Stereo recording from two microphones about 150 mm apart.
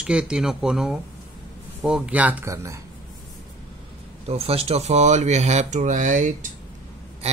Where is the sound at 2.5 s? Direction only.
20° right (ahead or behind).